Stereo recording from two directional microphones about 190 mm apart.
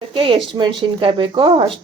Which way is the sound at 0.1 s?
30° right (ahead or behind).